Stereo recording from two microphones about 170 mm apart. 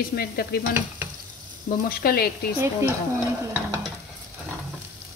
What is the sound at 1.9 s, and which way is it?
Stir, 60° left (ahead or behind).